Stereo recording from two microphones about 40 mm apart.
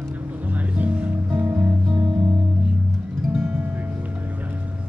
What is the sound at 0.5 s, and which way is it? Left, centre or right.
Music, right.